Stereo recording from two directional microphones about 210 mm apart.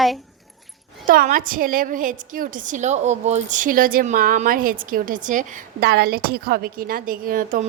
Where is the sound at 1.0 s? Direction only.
40° right (ahead or behind).